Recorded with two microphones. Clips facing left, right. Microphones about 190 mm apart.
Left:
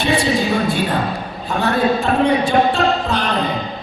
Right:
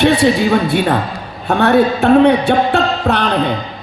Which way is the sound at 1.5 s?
60° right (ahead or behind).